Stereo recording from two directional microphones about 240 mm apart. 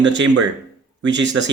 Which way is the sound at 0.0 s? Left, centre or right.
Right.